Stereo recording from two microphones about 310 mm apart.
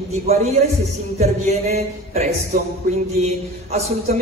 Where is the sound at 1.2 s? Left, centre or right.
Right.